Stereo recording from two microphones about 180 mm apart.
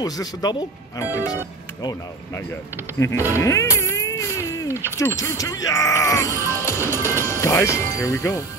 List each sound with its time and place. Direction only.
0.0 s speech: 20° left (ahead or behind)
3.3 s music: 15° left (ahead or behind)
4.8 s speech: 15° left (ahead or behind)
6.3 s music: 15° right (ahead or behind)
7.3 s speech: 15° left (ahead or behind)